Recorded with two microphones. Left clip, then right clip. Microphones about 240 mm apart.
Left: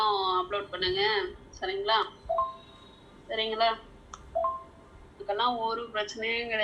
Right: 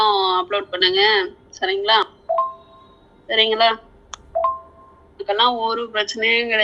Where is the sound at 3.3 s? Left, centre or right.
Right.